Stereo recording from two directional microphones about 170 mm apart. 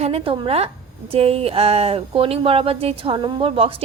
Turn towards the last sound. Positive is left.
turn(degrees=-35)  # may be behind; listen again after turning